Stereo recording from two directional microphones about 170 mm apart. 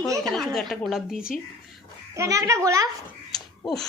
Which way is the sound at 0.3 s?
Centre (ahead or behind).